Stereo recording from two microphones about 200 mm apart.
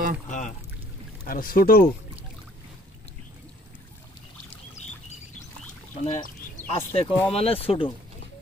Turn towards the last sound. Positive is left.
turn(degrees=30)  # may be behind; listen again after turning